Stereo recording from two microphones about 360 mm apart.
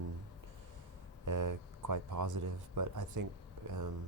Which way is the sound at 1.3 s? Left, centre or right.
Right.